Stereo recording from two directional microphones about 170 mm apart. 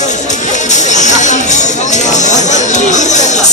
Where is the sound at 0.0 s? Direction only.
45° left (ahead or behind).